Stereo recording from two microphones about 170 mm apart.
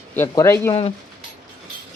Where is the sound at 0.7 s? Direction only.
35° left (ahead or behind).